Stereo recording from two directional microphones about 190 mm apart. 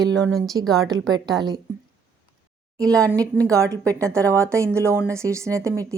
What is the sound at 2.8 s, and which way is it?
Speech, 5° left (ahead or behind).